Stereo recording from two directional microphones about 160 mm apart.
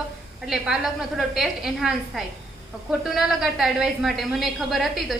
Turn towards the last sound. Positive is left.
turn(degrees=0)  # may be behind; listen again after turning